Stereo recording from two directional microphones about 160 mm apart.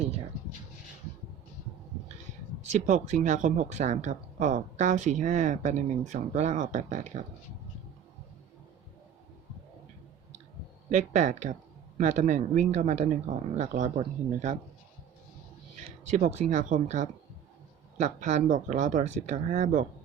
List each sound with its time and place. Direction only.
2.7 s speech: 50° right (ahead or behind)
10.9 s speech: 50° right (ahead or behind)
16.0 s speech: 45° right (ahead or behind)